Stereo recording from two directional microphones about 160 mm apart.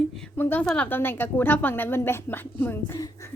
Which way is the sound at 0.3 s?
10° left (ahead or behind).